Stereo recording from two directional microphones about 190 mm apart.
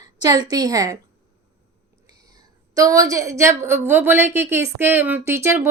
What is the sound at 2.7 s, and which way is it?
A woman's voice, 20° right (ahead or behind).